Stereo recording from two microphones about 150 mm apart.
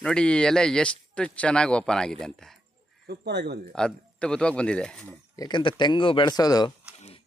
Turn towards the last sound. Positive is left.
turn(degrees=25)  # may be behind; listen again after turning